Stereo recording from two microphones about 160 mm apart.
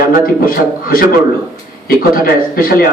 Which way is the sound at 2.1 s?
65° left (ahead or behind).